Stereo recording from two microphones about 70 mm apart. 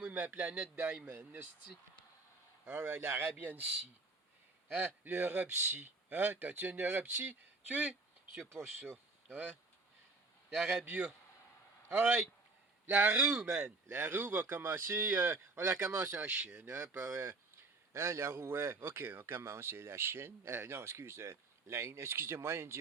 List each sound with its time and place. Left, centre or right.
0.1 s a man's voice: right
1.1 s a man's voice: right
2.6 s a man's voice: right
8.4 s speech: centre
10.5 s speech: centre
10.8 s a man's voice: centre
12.9 s a man's voice: right
16.3 s a man's voice: right
16.6 s speech: right